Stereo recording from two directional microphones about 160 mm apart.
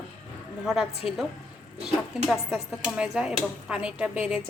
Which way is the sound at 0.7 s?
Centre (ahead or behind).